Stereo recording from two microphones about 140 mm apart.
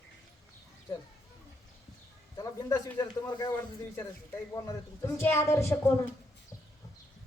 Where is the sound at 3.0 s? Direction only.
30° left (ahead or behind).